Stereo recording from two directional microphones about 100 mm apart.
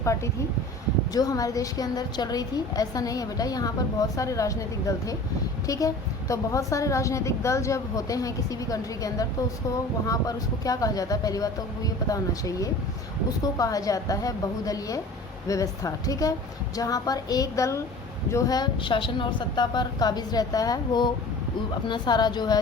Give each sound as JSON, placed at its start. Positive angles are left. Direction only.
{"t": 1.1, "sound": "a woman's voice", "side_deg": 35}
{"t": 18.5, "sound": "a woman's voice", "side_deg": 50}